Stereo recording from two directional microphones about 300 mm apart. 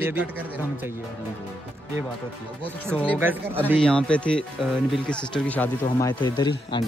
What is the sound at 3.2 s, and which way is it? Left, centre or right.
A man's voice, centre.